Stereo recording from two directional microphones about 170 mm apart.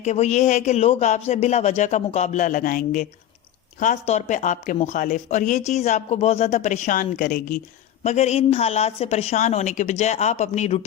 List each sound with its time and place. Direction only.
0.0 s speech: 40° left (ahead or behind)
8.0 s a woman's voice: 40° left (ahead or behind)